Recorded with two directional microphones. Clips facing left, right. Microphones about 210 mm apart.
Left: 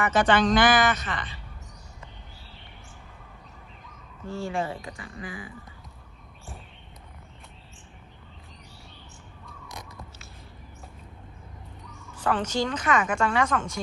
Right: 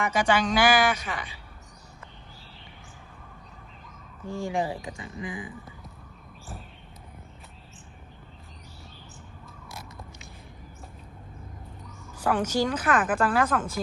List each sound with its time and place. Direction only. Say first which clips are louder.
0.0 s a woman's voice: left 3 dB; 10° right (ahead or behind)
4.3 s a woman's voice: right 1 dB; 15° right (ahead or behind)
9.5 s caw: left 2 dB; centre (ahead or behind)
12.1 s a woman's voice: right 1 dB; 10° right (ahead or behind)